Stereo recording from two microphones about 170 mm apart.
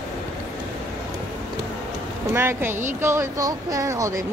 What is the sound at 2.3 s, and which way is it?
Speech, 15° right (ahead or behind).